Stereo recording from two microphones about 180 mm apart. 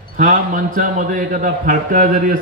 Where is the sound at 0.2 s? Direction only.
45° right (ahead or behind).